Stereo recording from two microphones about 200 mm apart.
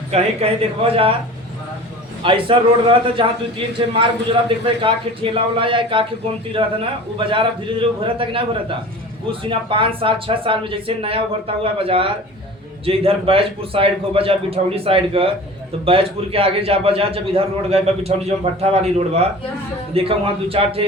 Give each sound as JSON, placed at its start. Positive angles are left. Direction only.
{"t": 0.1, "sound": "a man's voice", "side_deg": -30}
{"t": 2.2, "sound": "a man's voice", "side_deg": -25}